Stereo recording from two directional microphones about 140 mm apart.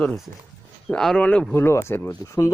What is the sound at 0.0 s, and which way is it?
Speech, 5° left (ahead or behind).